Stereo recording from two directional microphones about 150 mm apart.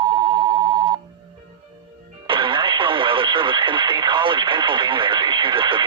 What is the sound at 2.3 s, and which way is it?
Speech, 35° right (ahead or behind).